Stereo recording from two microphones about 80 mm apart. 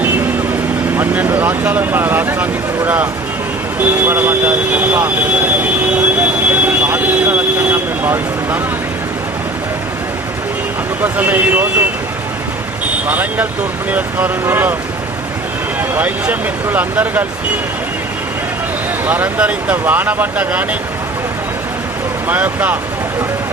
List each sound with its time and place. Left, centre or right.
0.9 s speech: right
5.6 s train: centre
6.5 s vehicle: right
11.0 s speech: right
13.1 s speech: right
16.0 s speech: right
19.0 s speech: right
22.3 s speech: right